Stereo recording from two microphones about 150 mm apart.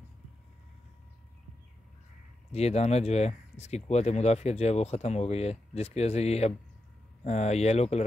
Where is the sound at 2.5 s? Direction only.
45° left (ahead or behind).